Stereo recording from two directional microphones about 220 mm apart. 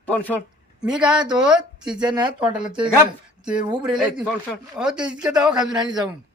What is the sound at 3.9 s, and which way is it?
Speech, 5° right (ahead or behind).